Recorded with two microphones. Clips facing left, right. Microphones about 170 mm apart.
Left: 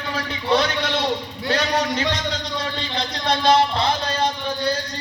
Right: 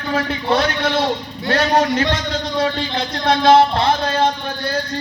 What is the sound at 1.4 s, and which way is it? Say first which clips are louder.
Speech: right 6 dB; 60° right (ahead or behind).